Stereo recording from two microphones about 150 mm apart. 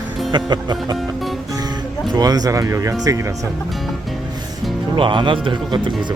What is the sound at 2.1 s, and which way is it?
Speech, 25° right (ahead or behind).